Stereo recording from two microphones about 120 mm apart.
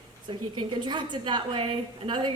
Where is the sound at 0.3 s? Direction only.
40° right (ahead or behind).